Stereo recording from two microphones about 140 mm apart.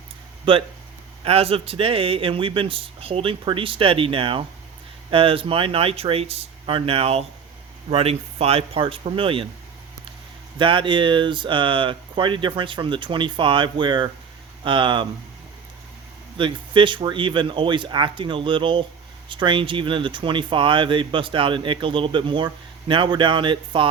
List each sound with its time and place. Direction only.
0.5 s speech: 40° right (ahead or behind)
10.6 s speech: 35° right (ahead or behind)
16.4 s speech: 35° right (ahead or behind)